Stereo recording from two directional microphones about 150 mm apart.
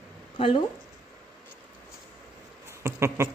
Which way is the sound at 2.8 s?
15° right (ahead or behind).